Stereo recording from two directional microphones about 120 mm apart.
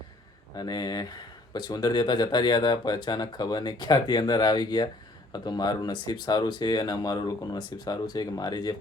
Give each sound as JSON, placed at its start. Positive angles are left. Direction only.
{"t": 0.5, "sound": "speech", "side_deg": 35}